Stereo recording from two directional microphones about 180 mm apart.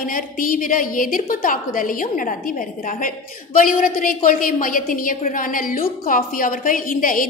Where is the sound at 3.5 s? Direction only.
50° left (ahead or behind).